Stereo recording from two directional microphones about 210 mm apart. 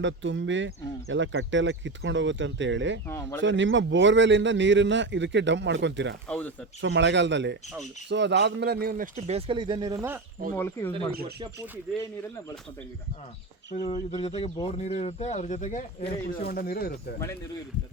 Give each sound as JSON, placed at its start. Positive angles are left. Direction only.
{"t": 0.0, "sound": "a man's voice", "side_deg": -60}
{"t": 3.1, "sound": "speech", "side_deg": 15}
{"t": 3.4, "sound": "a man's voice", "side_deg": -60}
{"t": 6.2, "sound": "speech", "side_deg": 5}
{"t": 6.8, "sound": "a man's voice", "side_deg": -60}
{"t": 10.5, "sound": "speech", "side_deg": 10}
{"t": 13.8, "sound": "speech", "side_deg": 25}
{"t": 16.4, "sound": "speech", "side_deg": 45}